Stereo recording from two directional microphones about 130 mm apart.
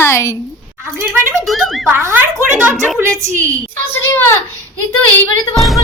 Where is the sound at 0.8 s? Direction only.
15° right (ahead or behind).